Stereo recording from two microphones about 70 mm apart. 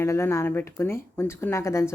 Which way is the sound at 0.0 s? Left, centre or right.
Left.